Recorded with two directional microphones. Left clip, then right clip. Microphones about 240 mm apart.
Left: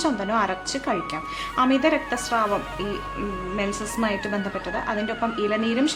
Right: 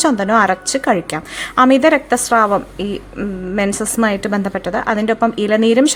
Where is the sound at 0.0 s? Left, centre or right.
Right.